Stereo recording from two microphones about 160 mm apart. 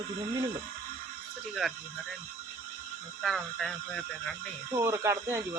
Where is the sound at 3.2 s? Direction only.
Centre (ahead or behind).